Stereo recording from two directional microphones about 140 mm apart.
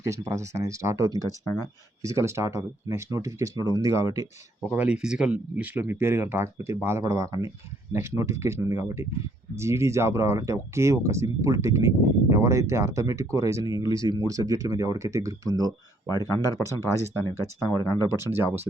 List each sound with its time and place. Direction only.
0.0 s speech: 20° right (ahead or behind)
1.5 s speech: 20° left (ahead or behind)
2.0 s speech: 20° right (ahead or behind)
4.7 s speech: 10° right (ahead or behind)
7.3 s speech: 40° left (ahead or behind)
7.9 s speech: 20° right (ahead or behind)
16.0 s speech: 25° left (ahead or behind)
18.2 s speech: 15° right (ahead or behind)